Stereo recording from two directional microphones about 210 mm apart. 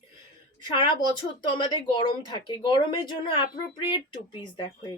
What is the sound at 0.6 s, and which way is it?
A woman's voice, 20° left (ahead or behind).